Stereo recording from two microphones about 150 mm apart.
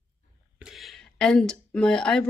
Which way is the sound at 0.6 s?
Centre (ahead or behind).